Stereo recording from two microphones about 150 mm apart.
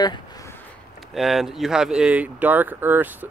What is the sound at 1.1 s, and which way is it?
Speech, centre (ahead or behind).